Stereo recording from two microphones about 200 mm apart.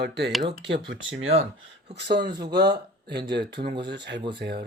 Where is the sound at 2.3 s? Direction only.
20° right (ahead or behind).